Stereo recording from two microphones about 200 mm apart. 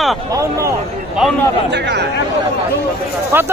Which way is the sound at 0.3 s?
15° right (ahead or behind).